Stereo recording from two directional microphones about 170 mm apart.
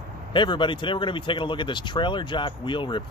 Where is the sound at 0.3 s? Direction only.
30° left (ahead or behind).